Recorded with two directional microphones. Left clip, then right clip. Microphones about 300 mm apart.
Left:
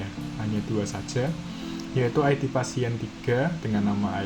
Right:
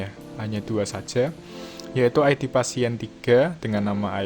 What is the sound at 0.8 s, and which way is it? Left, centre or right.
Speech, right.